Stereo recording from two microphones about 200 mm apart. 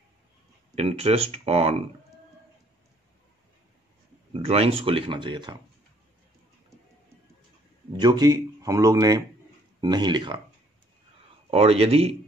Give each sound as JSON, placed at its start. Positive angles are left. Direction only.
{"t": 0.7, "sound": "speech", "side_deg": -30}
{"t": 4.3, "sound": "speech", "side_deg": -30}
{"t": 7.9, "sound": "speech", "side_deg": -20}
{"t": 11.5, "sound": "speech", "side_deg": -30}